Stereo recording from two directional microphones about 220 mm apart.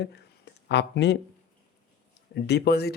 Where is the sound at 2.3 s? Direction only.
50° left (ahead or behind).